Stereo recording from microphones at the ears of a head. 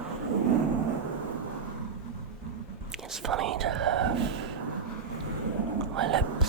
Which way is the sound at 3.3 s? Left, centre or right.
Right.